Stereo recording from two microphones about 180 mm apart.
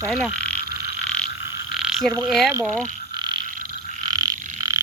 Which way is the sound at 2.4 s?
15° right (ahead or behind).